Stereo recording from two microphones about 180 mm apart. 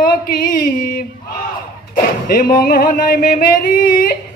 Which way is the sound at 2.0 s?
55° left (ahead or behind).